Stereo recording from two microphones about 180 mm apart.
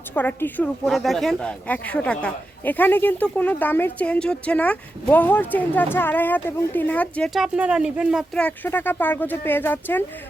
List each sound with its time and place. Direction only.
0.1 s speech: 10° left (ahead or behind); by 8.2 s 5° right (ahead or behind)
8.4 s speech: 10° left (ahead or behind)